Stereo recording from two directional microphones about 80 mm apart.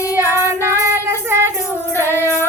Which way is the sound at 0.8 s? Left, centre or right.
Right.